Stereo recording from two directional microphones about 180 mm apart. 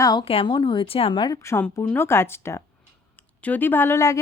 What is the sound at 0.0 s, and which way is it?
A woman's voice, 25° left (ahead or behind).